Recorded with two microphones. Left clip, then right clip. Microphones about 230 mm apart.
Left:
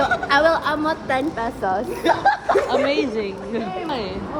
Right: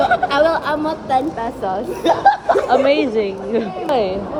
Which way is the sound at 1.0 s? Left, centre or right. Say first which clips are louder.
Right 4 dB; centre.